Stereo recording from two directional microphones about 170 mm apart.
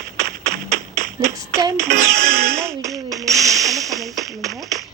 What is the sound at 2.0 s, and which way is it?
Speech, 60° right (ahead or behind).